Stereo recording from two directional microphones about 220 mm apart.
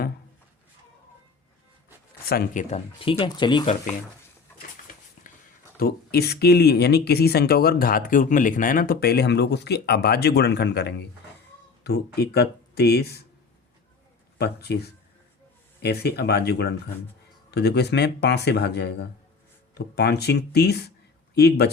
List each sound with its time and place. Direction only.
2.3 s speech: 35° left (ahead or behind); by 3.8 s 20° left (ahead or behind)
5.2 s a sound: 35° left (ahead or behind)
5.8 s speech: 45° left (ahead or behind)
14.3 s speech: 50° left (ahead or behind)